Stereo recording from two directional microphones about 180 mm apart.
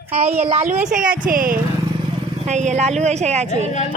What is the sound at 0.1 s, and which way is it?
Speech, 35° right (ahead or behind).